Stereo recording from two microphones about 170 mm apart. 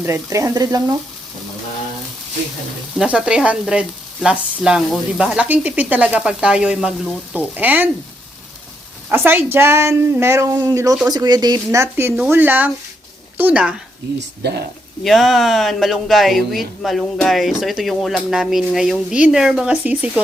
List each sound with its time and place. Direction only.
0.0 s speech: 15° right (ahead or behind)
2.9 s speech: 5° right (ahead or behind)
9.0 s a woman's voice: 10° right (ahead or behind)
15.0 s speech: centre (ahead or behind)